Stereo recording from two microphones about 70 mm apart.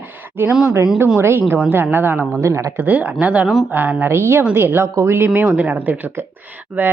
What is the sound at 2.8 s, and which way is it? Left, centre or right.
Speech, right.